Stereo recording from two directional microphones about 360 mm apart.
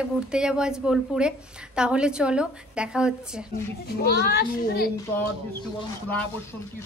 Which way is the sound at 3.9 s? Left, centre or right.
Left.